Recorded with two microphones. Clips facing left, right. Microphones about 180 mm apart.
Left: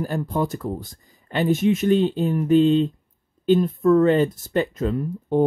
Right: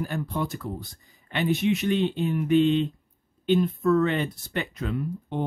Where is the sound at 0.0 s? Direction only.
40° left (ahead or behind).